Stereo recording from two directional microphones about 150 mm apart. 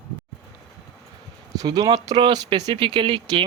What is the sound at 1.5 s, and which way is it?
Speech, 25° right (ahead or behind).